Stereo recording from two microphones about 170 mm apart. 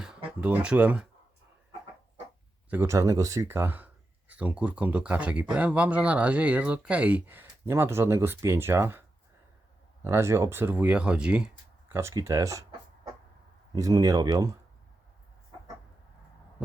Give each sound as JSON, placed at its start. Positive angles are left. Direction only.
{"t": 0.3, "sound": "speech", "side_deg": -10}
{"t": 2.6, "sound": "speech", "side_deg": -15}
{"t": 13.7, "sound": "speech", "side_deg": -20}